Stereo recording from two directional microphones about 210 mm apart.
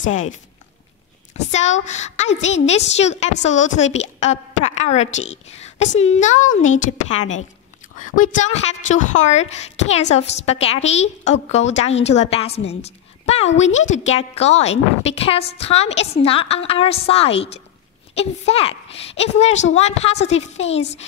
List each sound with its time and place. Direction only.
1.5 s a woman's voice: 35° left (ahead or behind)